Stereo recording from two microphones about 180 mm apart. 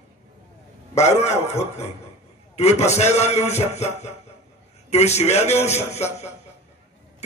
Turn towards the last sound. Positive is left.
turn(degrees=35)  # may be behind; listen again after turning